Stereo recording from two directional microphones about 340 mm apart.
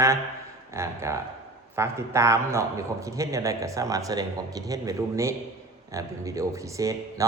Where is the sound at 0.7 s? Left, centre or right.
Centre.